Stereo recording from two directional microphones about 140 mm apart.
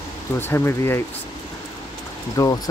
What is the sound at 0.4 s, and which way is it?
Speech, 15° left (ahead or behind).